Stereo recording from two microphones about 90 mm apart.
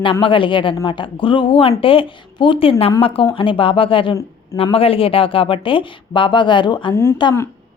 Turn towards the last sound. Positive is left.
turn(degrees=55)  # may be behind; listen again after turning